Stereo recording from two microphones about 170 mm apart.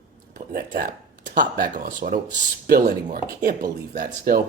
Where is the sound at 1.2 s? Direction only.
55° right (ahead or behind).